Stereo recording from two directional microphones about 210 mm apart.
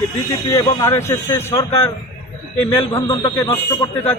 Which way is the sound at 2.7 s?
15° left (ahead or behind).